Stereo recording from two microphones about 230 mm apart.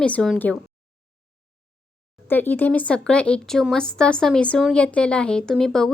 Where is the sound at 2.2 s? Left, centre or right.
Centre.